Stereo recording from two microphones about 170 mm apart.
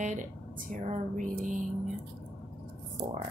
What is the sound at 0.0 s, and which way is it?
Speech, 50° right (ahead or behind).